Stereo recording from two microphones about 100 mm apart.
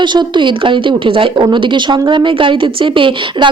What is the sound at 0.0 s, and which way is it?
A woman's voice, 50° right (ahead or behind).